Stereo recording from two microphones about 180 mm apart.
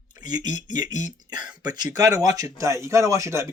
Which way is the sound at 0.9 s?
45° left (ahead or behind).